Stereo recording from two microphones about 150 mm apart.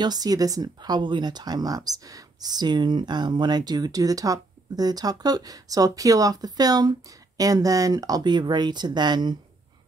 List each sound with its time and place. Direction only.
0.0 s speech: 25° right (ahead or behind)